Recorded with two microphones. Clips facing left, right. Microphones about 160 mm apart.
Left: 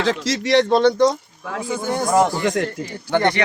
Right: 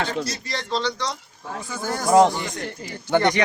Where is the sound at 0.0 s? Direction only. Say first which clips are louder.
Left 6 dB; 90° left; by 1.1 s 50° left (ahead or behind).